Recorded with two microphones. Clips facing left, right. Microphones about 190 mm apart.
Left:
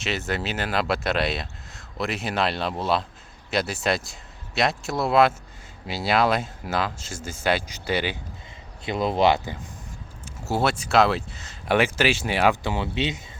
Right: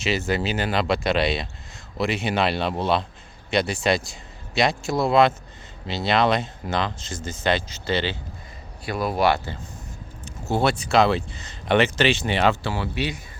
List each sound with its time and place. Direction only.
0.0 s speech: centre (ahead or behind)
8.8 s speech: 20° left (ahead or behind)
10.2 s speech: 5° left (ahead or behind); by 13.2 s 20° left (ahead or behind)